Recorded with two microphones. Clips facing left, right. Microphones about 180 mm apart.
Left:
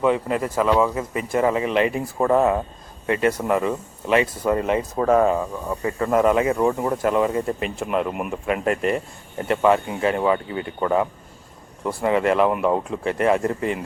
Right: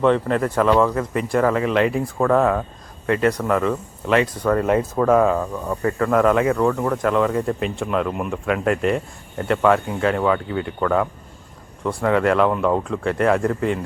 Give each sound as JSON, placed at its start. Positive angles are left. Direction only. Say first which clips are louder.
{"t": 0.0, "sound": "speech", "louder": "right 3 dB", "side_deg": 5}